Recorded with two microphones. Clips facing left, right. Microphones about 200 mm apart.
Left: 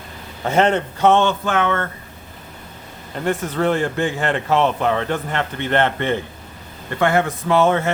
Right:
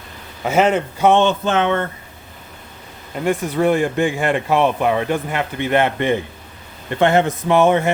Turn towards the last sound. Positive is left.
turn(degrees=-15)  # may be behind; listen again after turning